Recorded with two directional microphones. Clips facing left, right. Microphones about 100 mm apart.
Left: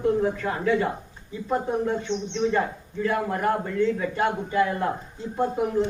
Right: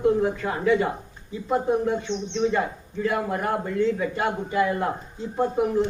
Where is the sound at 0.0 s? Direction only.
15° right (ahead or behind).